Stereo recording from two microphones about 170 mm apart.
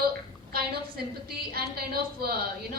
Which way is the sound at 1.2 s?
60° right (ahead or behind).